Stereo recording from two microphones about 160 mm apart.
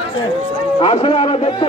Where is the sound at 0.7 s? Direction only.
35° left (ahead or behind).